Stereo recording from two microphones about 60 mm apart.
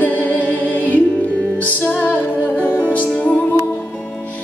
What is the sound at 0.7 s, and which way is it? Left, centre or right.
Music, left.